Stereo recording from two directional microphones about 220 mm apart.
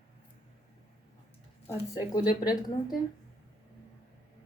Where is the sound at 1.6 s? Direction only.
15° left (ahead or behind).